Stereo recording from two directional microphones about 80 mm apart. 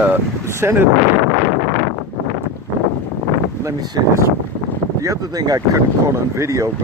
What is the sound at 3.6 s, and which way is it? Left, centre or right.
Speech, right.